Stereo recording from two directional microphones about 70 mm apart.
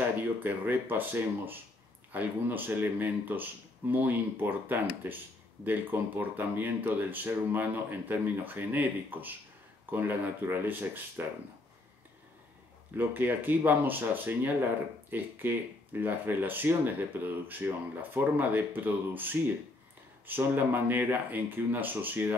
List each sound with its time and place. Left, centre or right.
0.4 s speech: right
12.9 s speech: right